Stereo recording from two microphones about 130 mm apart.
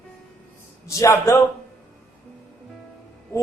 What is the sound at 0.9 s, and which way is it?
Speech, 20° left (ahead or behind).